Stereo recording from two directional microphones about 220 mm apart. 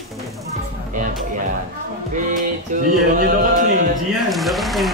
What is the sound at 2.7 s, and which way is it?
Speech, 35° right (ahead or behind).